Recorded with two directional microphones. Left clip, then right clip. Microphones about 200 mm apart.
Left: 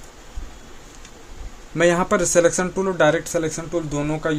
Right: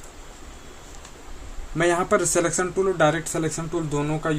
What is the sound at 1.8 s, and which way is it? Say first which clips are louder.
Speech: left 3 dB; 30° left (ahead or behind).